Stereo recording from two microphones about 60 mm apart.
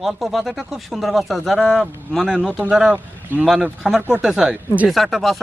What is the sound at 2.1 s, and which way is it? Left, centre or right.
Speech, centre.